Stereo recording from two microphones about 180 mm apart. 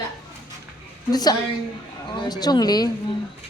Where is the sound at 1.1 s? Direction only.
20° left (ahead or behind).